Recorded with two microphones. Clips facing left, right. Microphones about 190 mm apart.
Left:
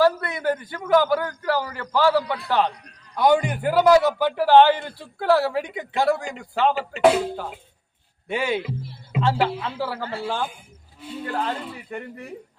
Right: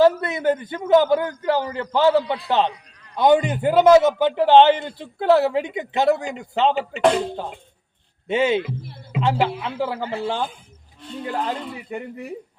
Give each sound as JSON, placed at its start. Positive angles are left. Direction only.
{"t": 0.0, "sound": "a man's voice", "side_deg": -20}
{"t": 6.7, "sound": "speech", "side_deg": 5}
{"t": 8.3, "sound": "a man's voice", "side_deg": -20}
{"t": 8.6, "sound": "speech", "side_deg": -55}
{"t": 9.2, "sound": "speech", "side_deg": -15}
{"t": 11.3, "sound": "speech", "side_deg": -10}